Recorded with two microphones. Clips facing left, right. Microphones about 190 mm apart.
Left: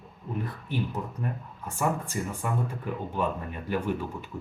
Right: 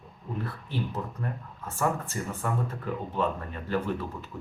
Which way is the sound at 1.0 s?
10° left (ahead or behind).